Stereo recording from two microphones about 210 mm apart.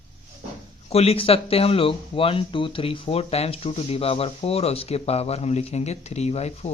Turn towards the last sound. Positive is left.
turn(degrees=30)  # may be behind; listen again after turning